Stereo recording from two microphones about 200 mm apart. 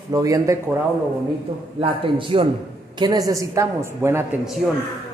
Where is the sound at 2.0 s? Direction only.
25° right (ahead or behind).